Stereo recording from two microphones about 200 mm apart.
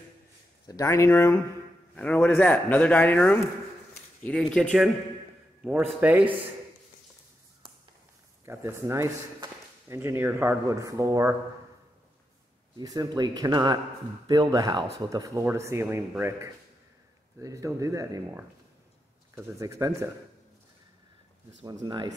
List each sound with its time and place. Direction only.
0.7 s speech: 15° left (ahead or behind); by 6.2 s 10° right (ahead or behind)
8.5 s speech: 10° right (ahead or behind)
12.7 s speech: 20° right (ahead or behind)
21.6 s speech: 20° right (ahead or behind)